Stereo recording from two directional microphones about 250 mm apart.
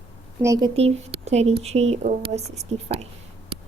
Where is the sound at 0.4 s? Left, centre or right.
Centre.